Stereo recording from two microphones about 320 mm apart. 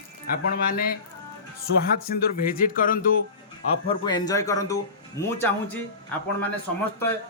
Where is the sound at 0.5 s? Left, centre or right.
Left.